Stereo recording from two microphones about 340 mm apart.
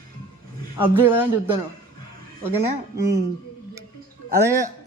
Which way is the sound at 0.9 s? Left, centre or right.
Centre.